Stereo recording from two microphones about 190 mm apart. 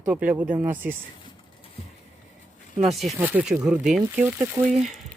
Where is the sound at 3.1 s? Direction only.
10° right (ahead or behind).